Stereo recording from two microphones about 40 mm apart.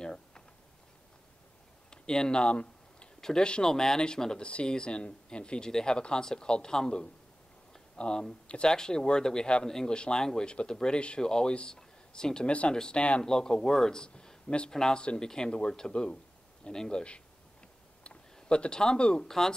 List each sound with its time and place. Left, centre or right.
0.0 s a sound: centre
1.9 s a sound: centre
3.2 s speech: centre
4.4 s speech: left
7.7 s a sound: left
8.6 s speech: centre
9.9 s speech: left
12.4 s speech: left
12.7 s speech: centre
18.0 s speech: left
19.2 s speech: centre